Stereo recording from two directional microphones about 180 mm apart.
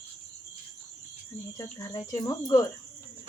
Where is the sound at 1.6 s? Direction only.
20° left (ahead or behind).